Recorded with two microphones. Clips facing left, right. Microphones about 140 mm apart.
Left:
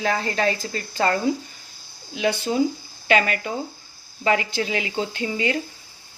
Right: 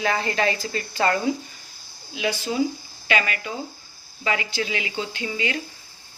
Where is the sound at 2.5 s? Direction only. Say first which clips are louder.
Left 2 dB; 35° left (ahead or behind).